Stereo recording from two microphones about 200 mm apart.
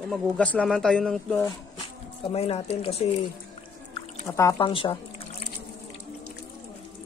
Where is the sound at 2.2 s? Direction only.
30° left (ahead or behind).